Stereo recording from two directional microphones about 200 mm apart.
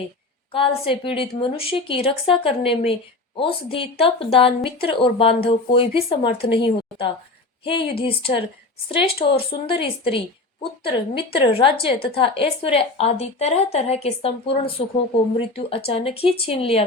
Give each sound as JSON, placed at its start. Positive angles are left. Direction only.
{"t": 0.5, "sound": "a woman's voice", "side_deg": 25}
{"t": 7.6, "sound": "a woman's voice", "side_deg": 25}